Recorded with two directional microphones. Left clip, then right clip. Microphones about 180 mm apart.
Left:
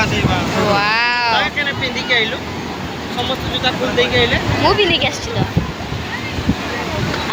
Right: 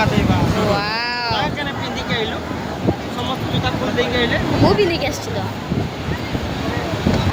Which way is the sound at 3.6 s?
70° right (ahead or behind).